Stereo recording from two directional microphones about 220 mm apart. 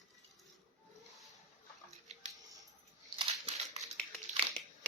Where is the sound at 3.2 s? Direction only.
25° right (ahead or behind).